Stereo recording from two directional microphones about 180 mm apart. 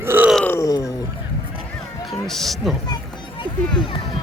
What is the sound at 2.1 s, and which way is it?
Speech, centre (ahead or behind).